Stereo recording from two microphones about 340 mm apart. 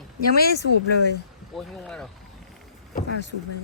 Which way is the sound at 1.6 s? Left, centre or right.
Centre.